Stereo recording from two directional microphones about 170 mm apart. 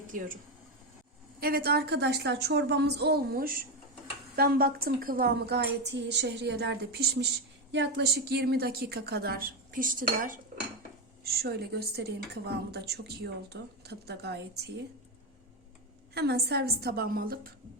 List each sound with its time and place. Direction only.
1.4 s a woman's voice: 65° right (ahead or behind)
7.7 s a woman's voice: 85° right; by 10.4 s 50° right (ahead or behind)
11.2 s a woman's voice: 65° right (ahead or behind)
16.1 s a woman's voice: 70° right (ahead or behind)